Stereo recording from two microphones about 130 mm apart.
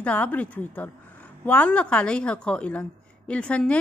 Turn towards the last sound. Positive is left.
turn(degrees=10)  # may be behind; listen again after turning